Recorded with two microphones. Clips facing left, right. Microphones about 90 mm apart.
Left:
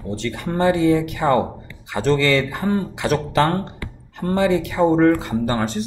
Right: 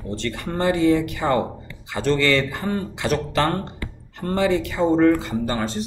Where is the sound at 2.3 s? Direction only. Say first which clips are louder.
Left 2 dB; 15° left (ahead or behind).